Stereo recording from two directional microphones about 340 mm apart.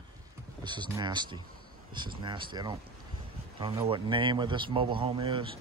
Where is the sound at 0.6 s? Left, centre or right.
Centre.